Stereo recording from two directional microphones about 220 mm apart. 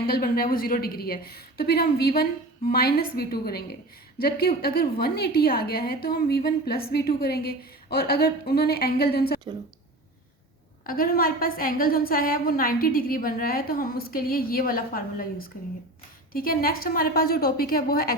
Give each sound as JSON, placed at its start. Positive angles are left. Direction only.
{"t": 0.1, "sound": "a woman's voice", "side_deg": 40}
{"t": 10.8, "sound": "a woman's voice", "side_deg": 40}